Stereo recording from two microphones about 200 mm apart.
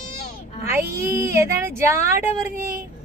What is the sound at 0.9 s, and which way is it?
Speech, 15° right (ahead or behind).